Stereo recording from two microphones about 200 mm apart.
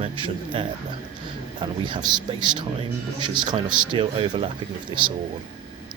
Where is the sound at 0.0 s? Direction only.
25° right (ahead or behind).